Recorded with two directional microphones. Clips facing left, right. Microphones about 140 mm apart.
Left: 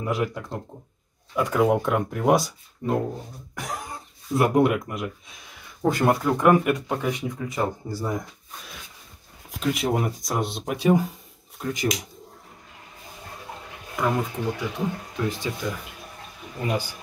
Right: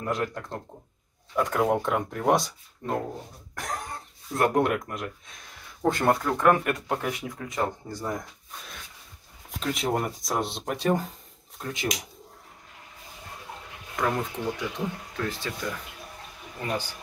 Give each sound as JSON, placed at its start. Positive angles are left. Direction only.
{"t": 0.0, "sound": "speech", "side_deg": 5}
{"t": 6.7, "sound": "speech", "side_deg": 0}
{"t": 13.9, "sound": "speech", "side_deg": 10}